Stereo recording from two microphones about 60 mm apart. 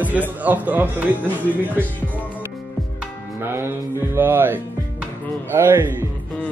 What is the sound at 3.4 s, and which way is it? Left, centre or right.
Speech, right.